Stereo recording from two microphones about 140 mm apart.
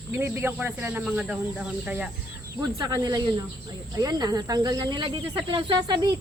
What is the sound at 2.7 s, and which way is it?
Speech, 25° right (ahead or behind).